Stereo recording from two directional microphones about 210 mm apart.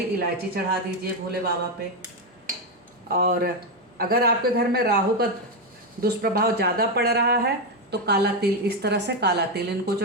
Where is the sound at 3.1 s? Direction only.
45° right (ahead or behind).